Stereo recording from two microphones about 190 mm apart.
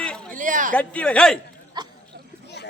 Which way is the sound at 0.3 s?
40° right (ahead or behind).